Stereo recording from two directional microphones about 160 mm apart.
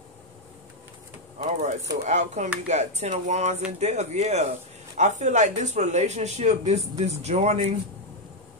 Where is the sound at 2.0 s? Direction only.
50° right (ahead or behind).